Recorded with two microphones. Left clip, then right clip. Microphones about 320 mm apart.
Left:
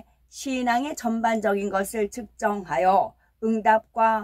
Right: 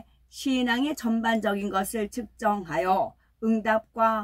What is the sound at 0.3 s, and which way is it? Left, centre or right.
Speech, centre.